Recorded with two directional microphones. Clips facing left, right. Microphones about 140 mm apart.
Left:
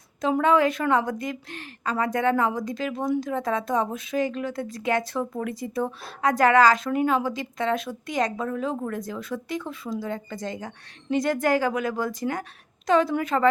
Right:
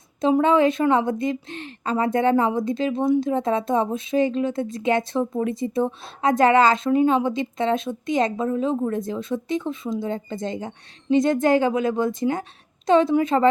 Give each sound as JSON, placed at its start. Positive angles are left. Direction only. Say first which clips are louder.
{"t": 0.2, "sound": "a woman's voice", "louder": "right 3 dB", "side_deg": -25}